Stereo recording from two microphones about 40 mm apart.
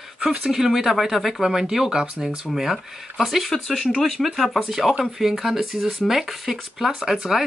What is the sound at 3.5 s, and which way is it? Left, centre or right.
Speech, centre.